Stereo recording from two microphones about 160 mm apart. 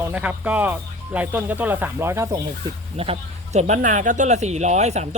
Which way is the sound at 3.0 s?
40° right (ahead or behind).